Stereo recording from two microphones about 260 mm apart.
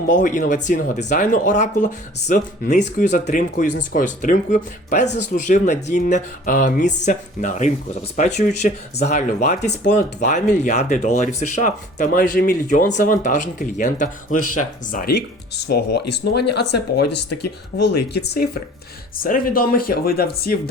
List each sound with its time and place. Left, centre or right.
0.1 s speech: left
16.3 s speech: left
16.6 s speech: left
19.2 s speech: left